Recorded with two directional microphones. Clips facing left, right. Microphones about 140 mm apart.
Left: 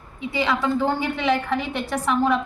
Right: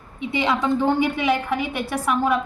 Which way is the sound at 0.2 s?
20° right (ahead or behind).